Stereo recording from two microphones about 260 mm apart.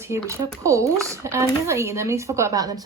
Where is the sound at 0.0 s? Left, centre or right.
Centre.